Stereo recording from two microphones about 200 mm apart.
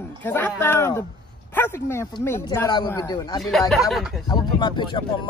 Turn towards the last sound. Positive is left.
turn(degrees=20)  # may be behind; listen again after turning